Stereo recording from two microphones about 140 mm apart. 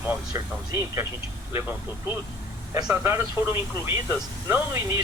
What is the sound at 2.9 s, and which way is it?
Speech, 20° right (ahead or behind).